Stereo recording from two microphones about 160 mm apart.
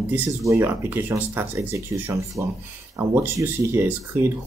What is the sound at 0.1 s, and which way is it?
Speech, 15° right (ahead or behind).